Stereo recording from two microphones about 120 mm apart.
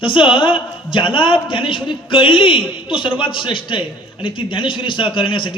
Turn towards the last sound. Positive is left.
turn(degrees=45)  # may be behind; listen again after turning